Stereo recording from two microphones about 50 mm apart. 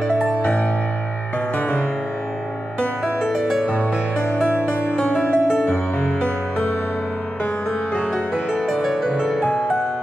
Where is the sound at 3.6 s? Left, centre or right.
Left.